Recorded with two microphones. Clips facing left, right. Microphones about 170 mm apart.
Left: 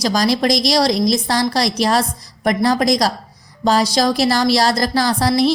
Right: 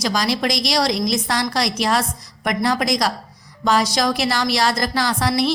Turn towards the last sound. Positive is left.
turn(degrees=35)  # may be behind; listen again after turning